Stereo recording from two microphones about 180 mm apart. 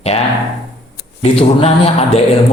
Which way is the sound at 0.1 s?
35° left (ahead or behind).